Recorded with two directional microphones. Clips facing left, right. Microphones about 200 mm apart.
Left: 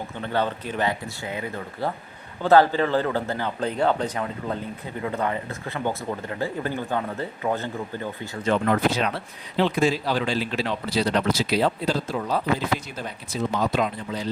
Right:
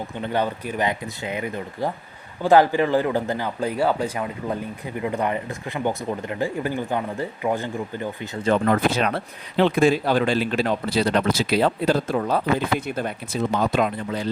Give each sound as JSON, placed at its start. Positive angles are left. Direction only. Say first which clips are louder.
{"t": 0.2, "sound": "speech", "louder": "right 1 dB", "side_deg": -15}
{"t": 8.4, "sound": "speech", "louder": "right 2 dB", "side_deg": -40}
{"t": 9.0, "sound": "a man's voice", "louder": "right 3 dB", "side_deg": -55}